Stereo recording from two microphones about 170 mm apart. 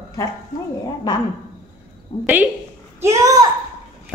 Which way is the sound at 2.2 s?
10° right (ahead or behind).